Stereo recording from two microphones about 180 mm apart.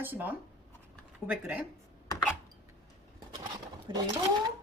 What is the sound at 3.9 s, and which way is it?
Speech, 25° right (ahead or behind).